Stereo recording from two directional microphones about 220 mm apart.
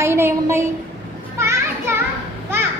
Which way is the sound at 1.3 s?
10° right (ahead or behind).